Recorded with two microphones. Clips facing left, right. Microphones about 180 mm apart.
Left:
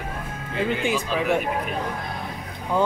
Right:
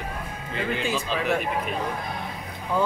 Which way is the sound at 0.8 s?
15° left (ahead or behind).